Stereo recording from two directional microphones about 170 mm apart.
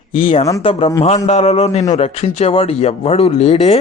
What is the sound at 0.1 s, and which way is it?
A man's voice, 30° left (ahead or behind).